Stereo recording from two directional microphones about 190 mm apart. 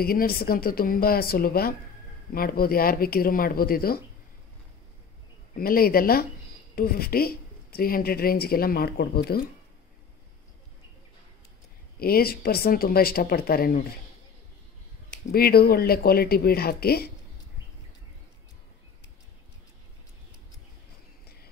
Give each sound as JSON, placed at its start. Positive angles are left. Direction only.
{"t": 0.0, "sound": "speech", "side_deg": 50}
{"t": 5.5, "sound": "speech", "side_deg": 50}
{"t": 12.0, "sound": "speech", "side_deg": 55}
{"t": 15.3, "sound": "speech", "side_deg": 55}